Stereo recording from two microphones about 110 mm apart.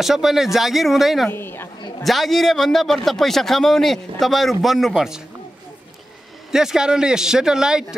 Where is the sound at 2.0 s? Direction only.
Centre (ahead or behind).